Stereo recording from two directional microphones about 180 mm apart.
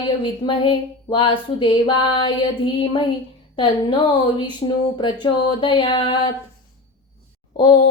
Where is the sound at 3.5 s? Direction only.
25° left (ahead or behind).